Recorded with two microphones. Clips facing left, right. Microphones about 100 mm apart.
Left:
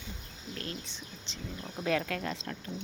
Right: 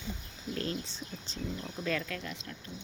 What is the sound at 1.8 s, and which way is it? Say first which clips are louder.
Speech: left 4 dB; 55° left (ahead or behind).